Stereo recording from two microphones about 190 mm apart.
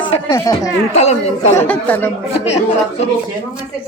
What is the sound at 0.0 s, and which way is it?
Speech, 20° left (ahead or behind).